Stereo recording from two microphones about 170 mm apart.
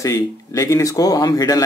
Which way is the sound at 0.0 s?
20° left (ahead or behind).